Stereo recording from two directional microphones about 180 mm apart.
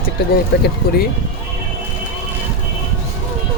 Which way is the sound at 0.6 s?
60° left (ahead or behind).